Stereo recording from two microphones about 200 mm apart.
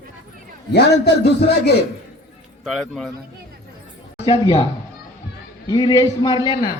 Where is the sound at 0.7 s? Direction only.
55° left (ahead or behind).